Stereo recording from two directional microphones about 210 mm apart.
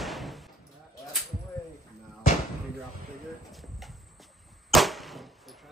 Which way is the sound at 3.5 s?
Centre (ahead or behind).